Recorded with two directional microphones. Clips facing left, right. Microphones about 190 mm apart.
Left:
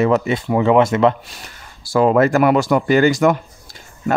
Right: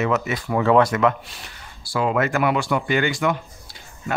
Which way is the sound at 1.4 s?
45° left (ahead or behind).